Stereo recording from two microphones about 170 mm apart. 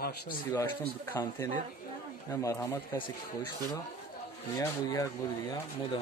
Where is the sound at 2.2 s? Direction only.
20° left (ahead or behind).